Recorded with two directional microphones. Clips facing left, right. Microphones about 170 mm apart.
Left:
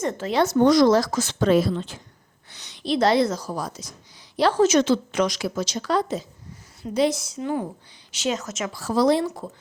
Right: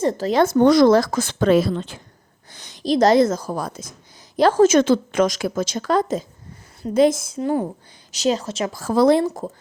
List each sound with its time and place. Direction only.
0.0 s a woman's voice: 35° right (ahead or behind); by 9.2 s 55° right (ahead or behind)
9.2 s a woman's voice: 40° right (ahead or behind)